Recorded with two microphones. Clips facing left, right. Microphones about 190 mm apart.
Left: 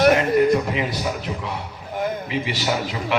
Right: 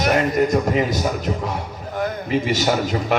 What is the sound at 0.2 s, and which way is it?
Music, 45° right (ahead or behind).